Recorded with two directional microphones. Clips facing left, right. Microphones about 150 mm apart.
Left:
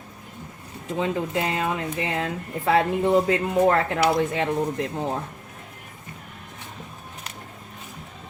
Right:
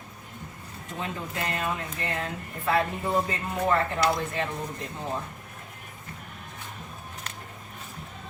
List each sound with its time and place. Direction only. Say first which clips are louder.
0.9 s speech: left 9 dB; 90° left